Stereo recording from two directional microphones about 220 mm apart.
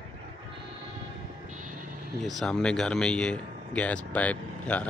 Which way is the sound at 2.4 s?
5° left (ahead or behind).